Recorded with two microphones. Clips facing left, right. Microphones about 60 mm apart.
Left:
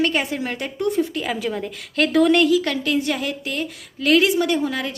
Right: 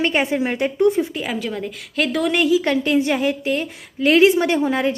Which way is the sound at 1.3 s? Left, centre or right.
Centre.